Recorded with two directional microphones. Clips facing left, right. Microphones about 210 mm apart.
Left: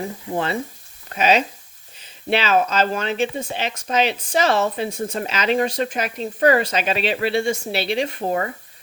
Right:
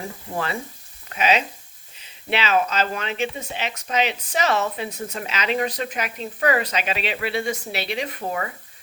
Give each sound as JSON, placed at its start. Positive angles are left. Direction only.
{"t": 1.1, "sound": "speech", "side_deg": 40}